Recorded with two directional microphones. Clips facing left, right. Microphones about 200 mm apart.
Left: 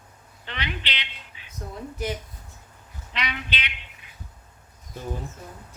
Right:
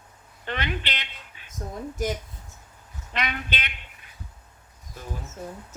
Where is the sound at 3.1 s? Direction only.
50° right (ahead or behind).